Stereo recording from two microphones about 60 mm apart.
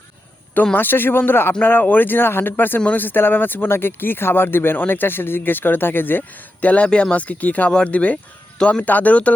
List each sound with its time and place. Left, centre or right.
0.5 s speech: left
0.8 s speech: left
6.6 s speech: left